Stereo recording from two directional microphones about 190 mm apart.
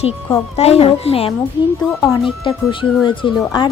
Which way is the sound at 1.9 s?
Centre (ahead or behind).